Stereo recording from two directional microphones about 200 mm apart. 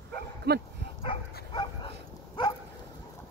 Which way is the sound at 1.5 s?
25° left (ahead or behind).